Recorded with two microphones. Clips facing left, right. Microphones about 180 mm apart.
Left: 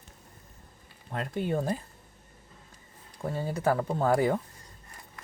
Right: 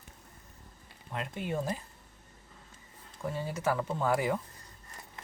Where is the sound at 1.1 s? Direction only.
40° left (ahead or behind).